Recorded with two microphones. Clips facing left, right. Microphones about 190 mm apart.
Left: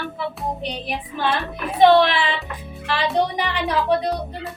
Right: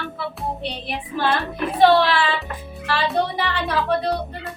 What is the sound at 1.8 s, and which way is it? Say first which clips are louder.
Speech: left 2 dB; 20° left (ahead or behind).